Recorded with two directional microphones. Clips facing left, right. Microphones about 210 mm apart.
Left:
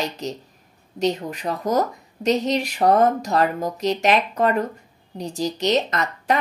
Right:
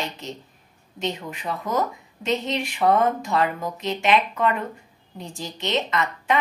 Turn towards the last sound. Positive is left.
turn(degrees=40)  # may be behind; listen again after turning